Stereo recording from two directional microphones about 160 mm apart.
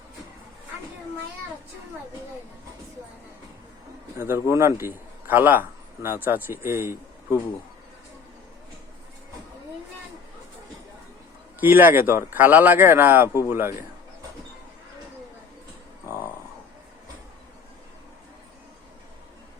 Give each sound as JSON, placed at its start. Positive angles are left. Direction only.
{"t": 4.2, "sound": "a man's voice", "side_deg": -15}
{"t": 11.6, "sound": "a man's voice", "side_deg": -10}
{"t": 16.0, "sound": "a sound", "side_deg": 20}